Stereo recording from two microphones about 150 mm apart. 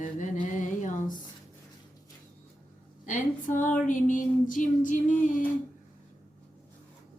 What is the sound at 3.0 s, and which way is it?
Female singing, 60° left (ahead or behind).